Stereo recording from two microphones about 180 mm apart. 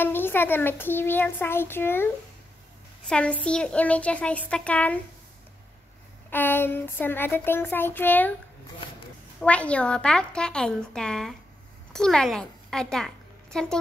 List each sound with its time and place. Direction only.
0.0 s a child's voice: 10° left (ahead or behind)
3.1 s a child's voice: 5° left (ahead or behind)
6.3 s a child's voice: 10° left (ahead or behind)
9.4 s a woman's voice: 5° left (ahead or behind)